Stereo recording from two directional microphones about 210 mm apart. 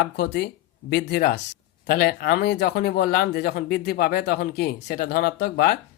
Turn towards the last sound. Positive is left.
turn(degrees=50)  # may be behind; listen again after turning